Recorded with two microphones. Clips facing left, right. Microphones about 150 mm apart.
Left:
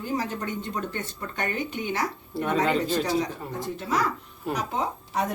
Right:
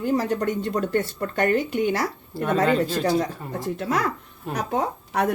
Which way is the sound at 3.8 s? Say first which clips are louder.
Right 1 dB; 60° right (ahead or behind).